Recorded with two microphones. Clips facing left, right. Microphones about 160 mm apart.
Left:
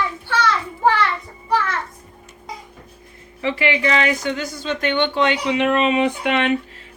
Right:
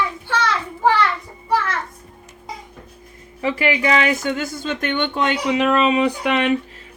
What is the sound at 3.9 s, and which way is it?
Speech, 40° left (ahead or behind).